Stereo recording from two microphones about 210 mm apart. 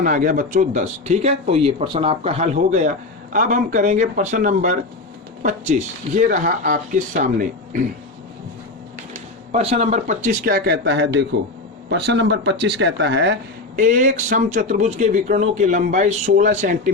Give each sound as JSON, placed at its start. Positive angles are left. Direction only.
{"t": 0.0, "sound": "speech", "side_deg": -40}
{"t": 9.5, "sound": "speech", "side_deg": -30}
{"t": 13.7, "sound": "speech", "side_deg": -40}